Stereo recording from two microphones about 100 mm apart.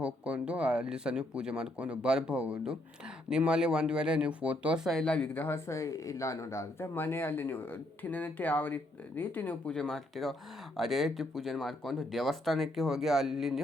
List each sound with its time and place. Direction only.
0.0 s speech: 10° right (ahead or behind)
4.9 s speech: 5° left (ahead or behind)